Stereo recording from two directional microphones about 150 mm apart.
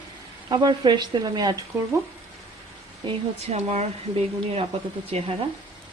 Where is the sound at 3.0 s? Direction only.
45° right (ahead or behind).